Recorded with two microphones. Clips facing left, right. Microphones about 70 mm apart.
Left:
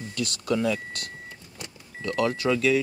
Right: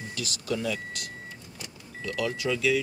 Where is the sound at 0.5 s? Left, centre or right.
Left.